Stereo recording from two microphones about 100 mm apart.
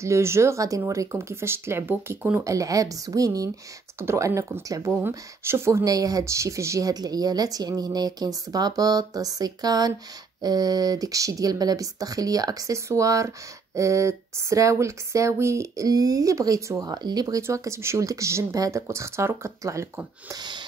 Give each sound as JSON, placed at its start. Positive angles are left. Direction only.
{"t": 0.0, "sound": "speech", "side_deg": -30}
{"t": 4.6, "sound": "speech", "side_deg": -35}
{"t": 4.9, "sound": "speech", "side_deg": -20}
{"t": 17.4, "sound": "speech", "side_deg": -30}
{"t": 20.3, "sound": "a sound", "side_deg": -50}